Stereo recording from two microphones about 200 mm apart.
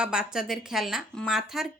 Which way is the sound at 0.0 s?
5° right (ahead or behind).